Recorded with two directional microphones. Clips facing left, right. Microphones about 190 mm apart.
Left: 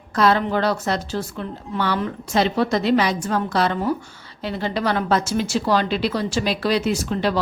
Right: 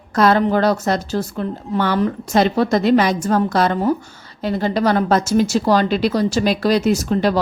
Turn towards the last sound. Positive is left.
turn(degrees=-45)  # may be behind; listen again after turning